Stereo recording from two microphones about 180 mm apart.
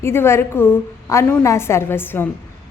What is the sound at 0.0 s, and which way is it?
A woman's voice, 15° left (ahead or behind).